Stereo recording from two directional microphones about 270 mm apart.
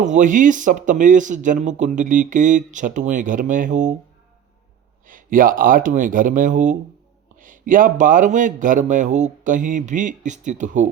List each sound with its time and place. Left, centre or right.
0.0 s speech: right
5.0 s speech: right